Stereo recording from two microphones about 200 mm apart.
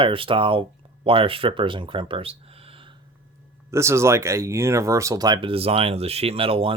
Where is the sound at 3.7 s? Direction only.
15° right (ahead or behind).